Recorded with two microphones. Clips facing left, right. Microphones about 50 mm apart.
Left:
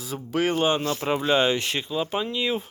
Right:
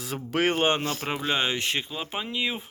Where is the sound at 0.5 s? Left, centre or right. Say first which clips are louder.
Left 1 dB; right.